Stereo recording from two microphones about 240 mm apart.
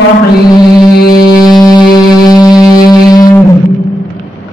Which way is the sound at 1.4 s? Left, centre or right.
Centre.